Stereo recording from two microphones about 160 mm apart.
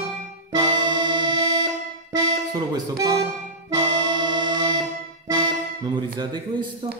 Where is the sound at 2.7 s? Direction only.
25° right (ahead or behind).